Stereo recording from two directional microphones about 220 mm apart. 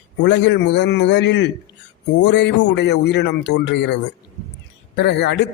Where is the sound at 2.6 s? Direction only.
50° left (ahead or behind).